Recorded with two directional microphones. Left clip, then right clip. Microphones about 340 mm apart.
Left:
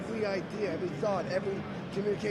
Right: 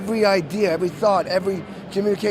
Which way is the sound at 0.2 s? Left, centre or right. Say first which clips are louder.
Right 15 dB; right.